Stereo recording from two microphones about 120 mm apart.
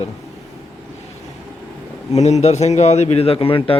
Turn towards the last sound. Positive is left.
turn(degrees=50)  # may be behind; listen again after turning